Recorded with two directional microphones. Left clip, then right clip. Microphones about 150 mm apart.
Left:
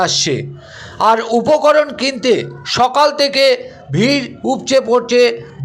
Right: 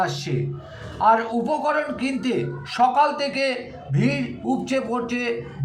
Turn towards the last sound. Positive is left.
turn(degrees=30)  # may be behind; listen again after turning